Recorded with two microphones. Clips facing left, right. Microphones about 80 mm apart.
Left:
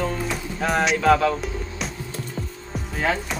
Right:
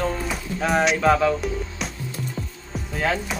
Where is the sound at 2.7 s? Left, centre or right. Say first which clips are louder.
Even; centre.